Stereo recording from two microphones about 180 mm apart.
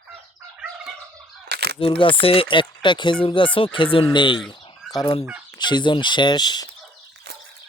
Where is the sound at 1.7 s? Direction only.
30° left (ahead or behind).